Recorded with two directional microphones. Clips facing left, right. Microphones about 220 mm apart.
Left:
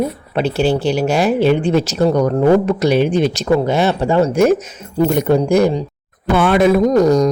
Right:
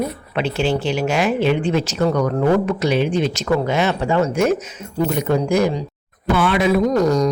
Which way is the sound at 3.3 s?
35° left (ahead or behind).